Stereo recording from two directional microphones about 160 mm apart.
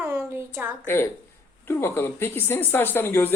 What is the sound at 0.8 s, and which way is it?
Speech, 15° left (ahead or behind).